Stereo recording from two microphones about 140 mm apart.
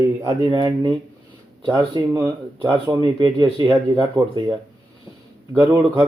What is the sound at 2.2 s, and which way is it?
Speech, 30° right (ahead or behind).